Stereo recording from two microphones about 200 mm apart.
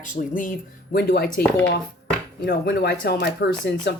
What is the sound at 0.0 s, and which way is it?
Speech, 40° left (ahead or behind).